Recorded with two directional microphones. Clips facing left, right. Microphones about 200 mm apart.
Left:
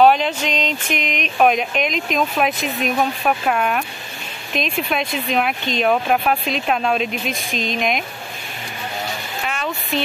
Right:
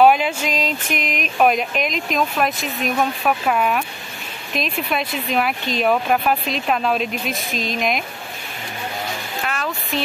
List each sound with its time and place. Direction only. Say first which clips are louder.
0.0 s speech: even; 10° right (ahead or behind)
9.5 s speech: left 2 dB; centre (ahead or behind)